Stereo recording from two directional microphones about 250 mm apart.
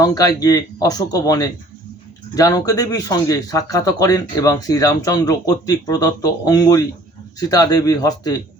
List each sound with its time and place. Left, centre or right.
0.0 s speech: centre